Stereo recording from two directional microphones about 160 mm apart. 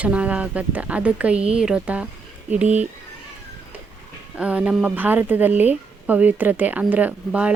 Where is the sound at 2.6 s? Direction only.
45° right (ahead or behind).